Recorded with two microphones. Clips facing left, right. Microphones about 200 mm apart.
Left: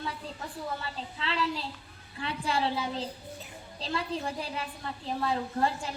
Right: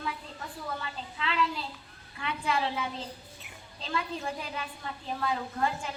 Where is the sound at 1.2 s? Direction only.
35° left (ahead or behind).